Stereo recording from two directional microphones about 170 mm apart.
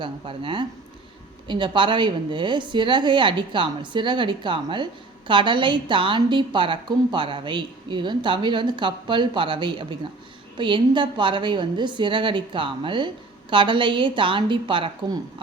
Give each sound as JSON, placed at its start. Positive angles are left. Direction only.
{"t": 0.0, "sound": "a woman's voice", "side_deg": -30}